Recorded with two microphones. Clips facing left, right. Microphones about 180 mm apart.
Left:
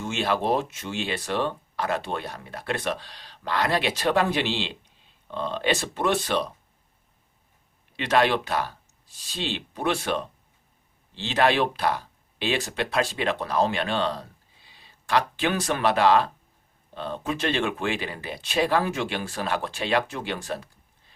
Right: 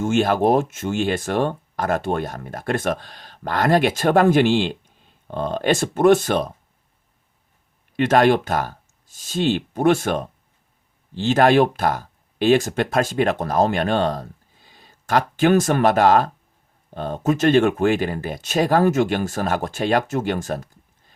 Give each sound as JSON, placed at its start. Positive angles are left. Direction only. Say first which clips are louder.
{"t": 0.0, "sound": "speech", "louder": "right 8 dB", "side_deg": -45}
{"t": 7.9, "sound": "speech", "louder": "right 6 dB", "side_deg": -45}